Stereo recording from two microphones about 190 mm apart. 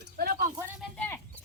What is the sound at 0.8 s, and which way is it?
Speech, 10° left (ahead or behind).